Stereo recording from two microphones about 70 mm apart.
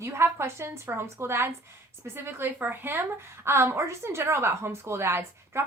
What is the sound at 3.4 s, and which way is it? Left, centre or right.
A woman's voice, right.